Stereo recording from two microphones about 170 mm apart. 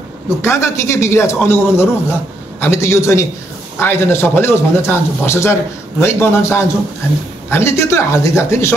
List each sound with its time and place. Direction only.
0.4 s speech: 15° left (ahead or behind)